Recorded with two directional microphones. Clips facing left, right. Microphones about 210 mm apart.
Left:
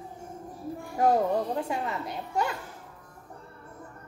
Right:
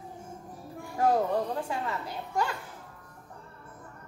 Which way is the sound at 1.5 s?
25° left (ahead or behind).